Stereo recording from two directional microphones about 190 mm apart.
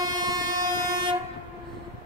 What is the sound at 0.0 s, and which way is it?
Train, 20° right (ahead or behind).